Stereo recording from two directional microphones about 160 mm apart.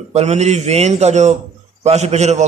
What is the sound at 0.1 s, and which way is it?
A man's voice, 45° right (ahead or behind).